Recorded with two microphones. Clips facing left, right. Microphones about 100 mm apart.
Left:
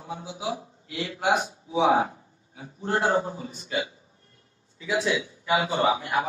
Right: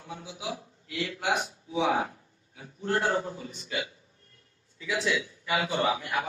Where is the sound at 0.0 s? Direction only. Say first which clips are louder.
Left 5 dB; 25° left (ahead or behind).